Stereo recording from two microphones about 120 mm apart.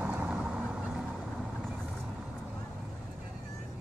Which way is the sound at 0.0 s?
15° right (ahead or behind).